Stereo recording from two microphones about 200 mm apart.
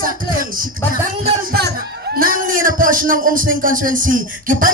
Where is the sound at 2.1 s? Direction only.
45° right (ahead or behind).